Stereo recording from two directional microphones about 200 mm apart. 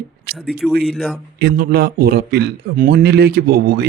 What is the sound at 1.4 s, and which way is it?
A man's voice, 50° right (ahead or behind).